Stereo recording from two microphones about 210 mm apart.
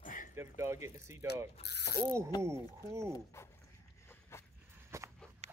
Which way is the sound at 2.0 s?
15° right (ahead or behind).